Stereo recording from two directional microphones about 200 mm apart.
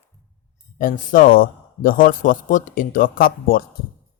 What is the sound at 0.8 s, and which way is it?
A man's voice, 40° left (ahead or behind).